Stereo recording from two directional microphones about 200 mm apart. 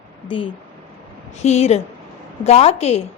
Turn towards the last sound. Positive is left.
turn(degrees=30)  # may be behind; listen again after turning